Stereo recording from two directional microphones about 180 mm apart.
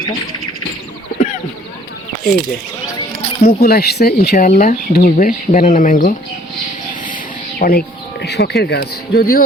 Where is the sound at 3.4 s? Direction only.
60° left (ahead or behind).